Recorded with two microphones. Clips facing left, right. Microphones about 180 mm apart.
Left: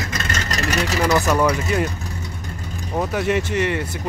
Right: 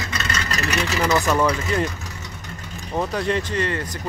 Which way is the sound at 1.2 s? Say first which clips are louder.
Left 2 dB; 15° left (ahead or behind).